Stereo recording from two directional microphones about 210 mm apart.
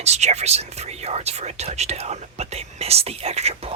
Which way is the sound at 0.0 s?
30° right (ahead or behind).